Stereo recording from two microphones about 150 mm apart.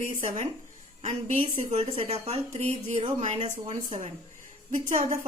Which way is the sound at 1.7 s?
45° right (ahead or behind).